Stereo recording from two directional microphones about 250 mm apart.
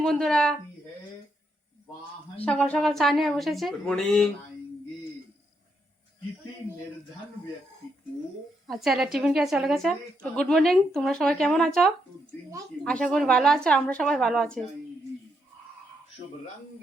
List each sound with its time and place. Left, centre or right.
0.0 s speech: centre
2.4 s speech: centre
8.6 s speech: centre